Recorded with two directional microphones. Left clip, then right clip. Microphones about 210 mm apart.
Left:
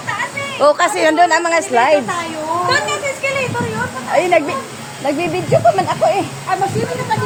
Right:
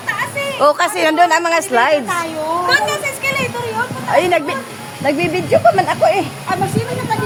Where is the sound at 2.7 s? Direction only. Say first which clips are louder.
Right 1 dB; 55° right (ahead or behind).